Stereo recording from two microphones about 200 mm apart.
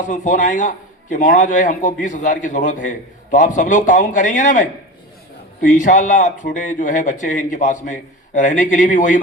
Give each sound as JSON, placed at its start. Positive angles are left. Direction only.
{"t": 0.0, "sound": "a man's voice", "side_deg": 40}